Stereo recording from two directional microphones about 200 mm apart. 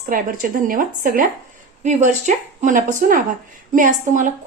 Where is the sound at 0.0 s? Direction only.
45° right (ahead or behind).